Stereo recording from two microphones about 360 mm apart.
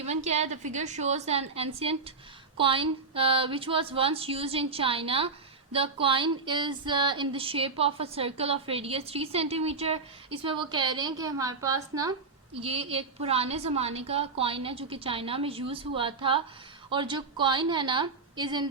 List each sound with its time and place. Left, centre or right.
0.0 s a woman's voice: centre